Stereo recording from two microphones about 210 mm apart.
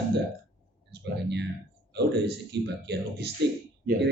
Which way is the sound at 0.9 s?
55° right (ahead or behind).